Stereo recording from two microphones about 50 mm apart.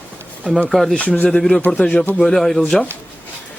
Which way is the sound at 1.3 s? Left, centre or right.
Centre.